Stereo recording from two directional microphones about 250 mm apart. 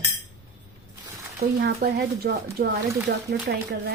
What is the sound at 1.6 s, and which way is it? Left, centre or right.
A woman's voice, right.